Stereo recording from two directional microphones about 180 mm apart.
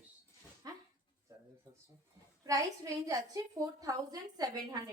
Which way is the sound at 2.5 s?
20° right (ahead or behind).